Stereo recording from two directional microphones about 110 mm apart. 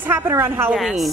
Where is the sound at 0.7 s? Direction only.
Centre (ahead or behind).